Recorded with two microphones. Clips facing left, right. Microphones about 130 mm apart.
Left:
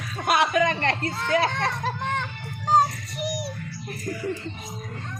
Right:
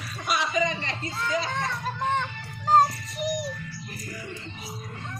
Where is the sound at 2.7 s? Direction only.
Centre (ahead or behind).